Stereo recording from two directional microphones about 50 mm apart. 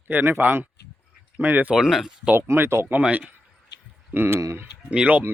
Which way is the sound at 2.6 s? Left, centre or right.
Right.